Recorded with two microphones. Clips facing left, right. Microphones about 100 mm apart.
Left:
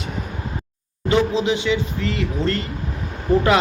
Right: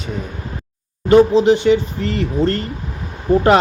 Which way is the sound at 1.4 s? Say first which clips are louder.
Right 7 dB; 40° right (ahead or behind).